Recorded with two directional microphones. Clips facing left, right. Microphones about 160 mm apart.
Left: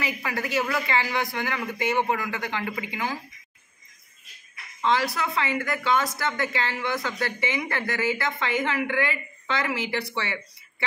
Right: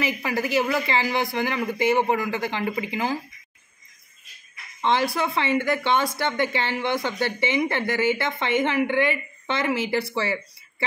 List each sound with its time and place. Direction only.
0.0 s speech: 25° right (ahead or behind)
4.8 s speech: 25° right (ahead or behind)